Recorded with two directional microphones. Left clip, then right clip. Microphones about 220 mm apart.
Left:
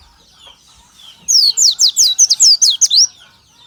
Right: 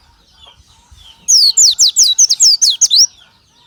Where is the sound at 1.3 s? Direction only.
25° right (ahead or behind).